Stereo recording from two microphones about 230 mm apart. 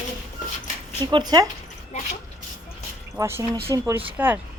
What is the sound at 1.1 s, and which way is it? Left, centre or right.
Speech, centre.